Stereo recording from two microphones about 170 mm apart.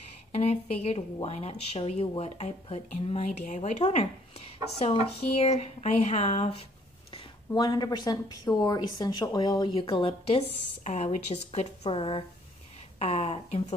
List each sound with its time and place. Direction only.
0.3 s a woman's voice: 35° left (ahead or behind)